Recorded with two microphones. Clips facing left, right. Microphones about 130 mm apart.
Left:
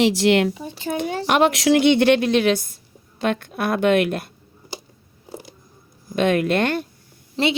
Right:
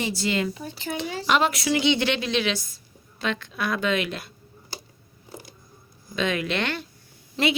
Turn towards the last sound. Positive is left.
turn(degrees=30)  # may be behind; listen again after turning